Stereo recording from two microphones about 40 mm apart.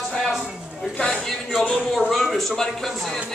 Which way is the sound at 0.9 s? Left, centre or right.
Centre.